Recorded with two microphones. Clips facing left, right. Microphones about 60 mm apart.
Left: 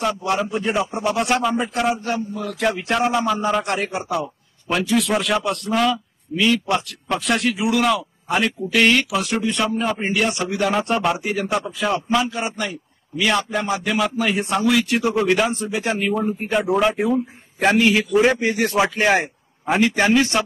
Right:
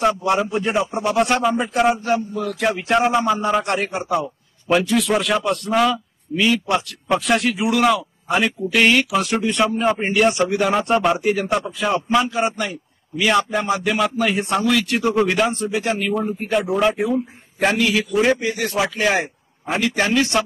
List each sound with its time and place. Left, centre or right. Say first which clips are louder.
0.0 s a man's voice: right 3 dB; centre
15.8 s a man's voice: left 1 dB; left
16.1 s a man's voice: even; centre
17.6 s a man's voice: left 2 dB; left
18.1 s a man's voice: even; centre
18.4 s speech: left 3 dB; left
19.8 s a man's voice: left 2 dB; left